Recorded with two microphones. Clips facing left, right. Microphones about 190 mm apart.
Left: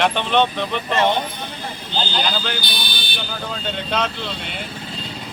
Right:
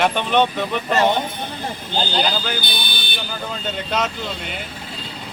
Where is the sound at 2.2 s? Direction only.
5° right (ahead or behind).